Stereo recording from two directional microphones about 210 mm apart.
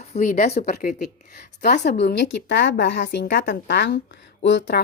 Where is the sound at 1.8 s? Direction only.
55° left (ahead or behind).